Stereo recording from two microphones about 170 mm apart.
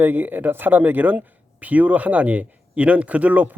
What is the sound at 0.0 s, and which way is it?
Speech, 10° right (ahead or behind).